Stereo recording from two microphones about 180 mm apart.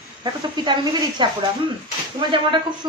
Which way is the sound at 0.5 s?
25° right (ahead or behind).